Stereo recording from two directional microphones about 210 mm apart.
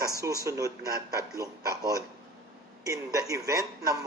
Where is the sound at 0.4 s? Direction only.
15° right (ahead or behind).